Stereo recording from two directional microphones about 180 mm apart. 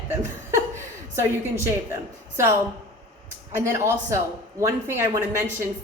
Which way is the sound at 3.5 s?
15° right (ahead or behind).